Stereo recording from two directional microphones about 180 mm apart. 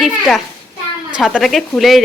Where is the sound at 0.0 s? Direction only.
Centre (ahead or behind).